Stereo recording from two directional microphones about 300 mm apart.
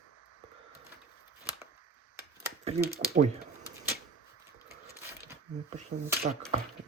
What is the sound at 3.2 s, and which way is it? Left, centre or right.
Speech, right.